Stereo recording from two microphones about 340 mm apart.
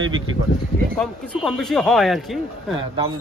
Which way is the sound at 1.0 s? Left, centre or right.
Centre.